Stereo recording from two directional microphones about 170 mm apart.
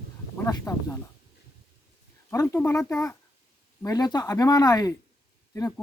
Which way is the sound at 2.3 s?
15° left (ahead or behind).